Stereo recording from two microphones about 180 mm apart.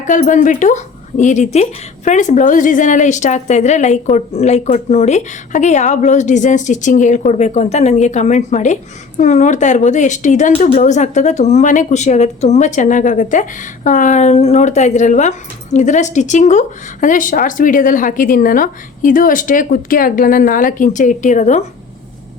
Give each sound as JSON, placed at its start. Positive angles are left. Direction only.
{"t": 0.0, "sound": "a woman's voice", "side_deg": 45}